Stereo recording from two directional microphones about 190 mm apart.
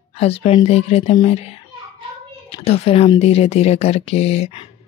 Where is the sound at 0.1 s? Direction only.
30° left (ahead or behind).